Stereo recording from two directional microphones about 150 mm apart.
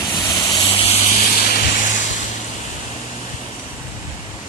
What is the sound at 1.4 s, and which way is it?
Vehicle, 85° left.